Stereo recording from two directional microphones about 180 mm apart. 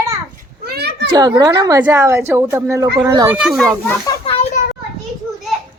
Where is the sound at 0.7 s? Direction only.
65° right (ahead or behind).